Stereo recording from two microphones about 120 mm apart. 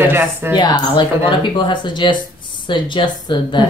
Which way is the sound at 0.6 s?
40° left (ahead or behind).